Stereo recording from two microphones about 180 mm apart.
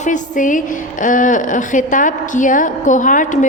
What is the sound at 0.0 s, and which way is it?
A woman's voice, 45° left (ahead or behind).